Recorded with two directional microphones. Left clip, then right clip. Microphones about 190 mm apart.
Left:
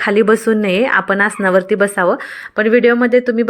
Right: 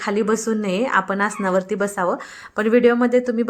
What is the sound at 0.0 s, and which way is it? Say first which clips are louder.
A woman's voice: left 9 dB; 25° left (ahead or behind).